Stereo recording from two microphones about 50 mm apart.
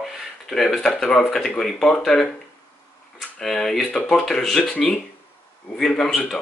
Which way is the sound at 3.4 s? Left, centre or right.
Centre.